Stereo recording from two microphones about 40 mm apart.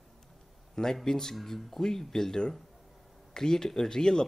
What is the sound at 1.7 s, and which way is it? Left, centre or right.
Speech, centre.